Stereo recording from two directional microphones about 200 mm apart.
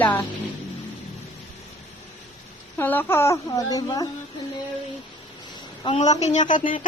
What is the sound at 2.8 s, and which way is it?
A woman's voice, 10° left (ahead or behind).